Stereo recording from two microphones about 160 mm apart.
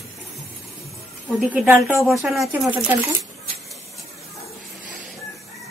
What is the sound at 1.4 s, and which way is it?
Speech, 5° right (ahead or behind).